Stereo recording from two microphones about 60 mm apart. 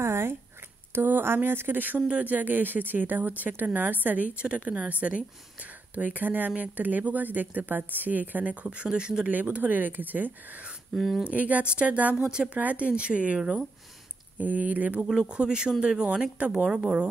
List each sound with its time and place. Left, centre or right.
0.0 s a sound: right
0.9 s speech: right; by 9.3 s centre
9.3 s speech: right
12.2 s speech: centre
12.5 s speech: right
14.4 s speech: right
15.2 s speech: centre